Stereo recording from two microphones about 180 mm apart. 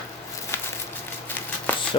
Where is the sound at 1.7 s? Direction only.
10° left (ahead or behind).